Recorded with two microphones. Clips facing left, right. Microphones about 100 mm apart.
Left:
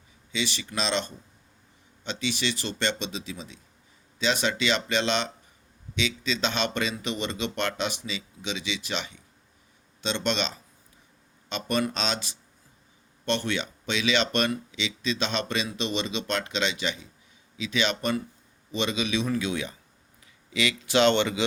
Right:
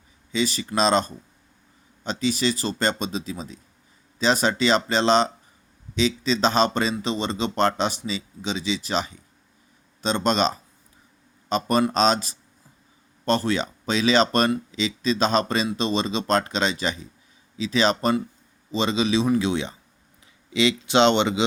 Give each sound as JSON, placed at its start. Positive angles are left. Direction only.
{"t": 0.3, "sound": "a man's voice", "side_deg": -40}